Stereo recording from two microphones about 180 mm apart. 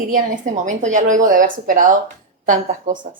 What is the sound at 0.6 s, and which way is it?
Speech, 45° right (ahead or behind).